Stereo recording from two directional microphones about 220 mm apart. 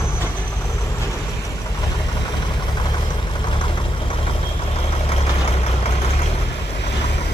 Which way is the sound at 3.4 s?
20° left (ahead or behind).